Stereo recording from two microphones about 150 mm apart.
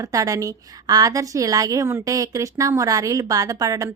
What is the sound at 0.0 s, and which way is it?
A woman's voice, 20° right (ahead or behind).